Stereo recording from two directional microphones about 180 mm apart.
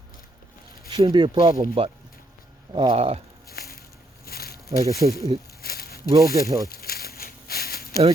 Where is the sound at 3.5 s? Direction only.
60° left (ahead or behind).